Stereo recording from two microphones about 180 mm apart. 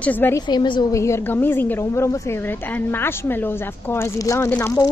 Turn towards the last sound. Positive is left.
turn(degrees=15)  # may be behind; listen again after turning